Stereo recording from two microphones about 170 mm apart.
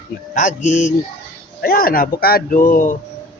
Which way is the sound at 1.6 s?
60° left (ahead or behind).